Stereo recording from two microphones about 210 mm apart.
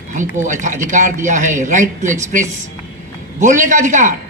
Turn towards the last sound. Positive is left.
turn(degrees=-35)  # may be behind; listen again after turning